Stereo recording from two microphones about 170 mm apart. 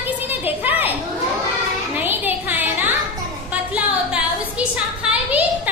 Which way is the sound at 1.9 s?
10° right (ahead or behind).